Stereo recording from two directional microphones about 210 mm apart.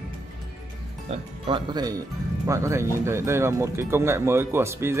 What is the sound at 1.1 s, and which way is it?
Speech, 25° right (ahead or behind).